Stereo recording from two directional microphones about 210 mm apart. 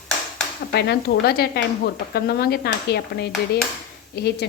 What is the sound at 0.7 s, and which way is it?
A woman's voice, 50° left (ahead or behind).